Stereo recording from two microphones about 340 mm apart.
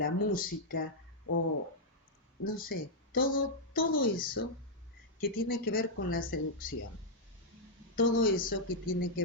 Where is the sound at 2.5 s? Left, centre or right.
Left.